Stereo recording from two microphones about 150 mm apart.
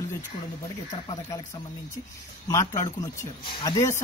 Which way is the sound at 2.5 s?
20° left (ahead or behind).